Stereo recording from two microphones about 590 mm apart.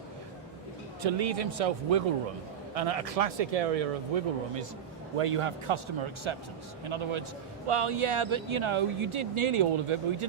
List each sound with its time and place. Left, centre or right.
1.0 s speech: right
5.1 s a man's voice: right